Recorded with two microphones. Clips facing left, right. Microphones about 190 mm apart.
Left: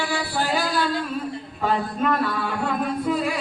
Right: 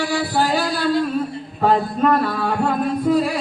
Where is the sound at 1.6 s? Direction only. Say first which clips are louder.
Right 6 dB; 40° right (ahead or behind).